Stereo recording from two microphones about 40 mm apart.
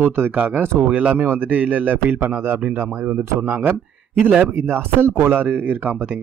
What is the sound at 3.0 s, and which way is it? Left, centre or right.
Speech, right.